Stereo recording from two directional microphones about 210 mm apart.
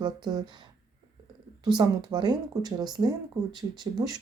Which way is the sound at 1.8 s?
20° right (ahead or behind).